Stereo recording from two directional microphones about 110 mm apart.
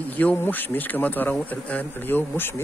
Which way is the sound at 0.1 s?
15° left (ahead or behind).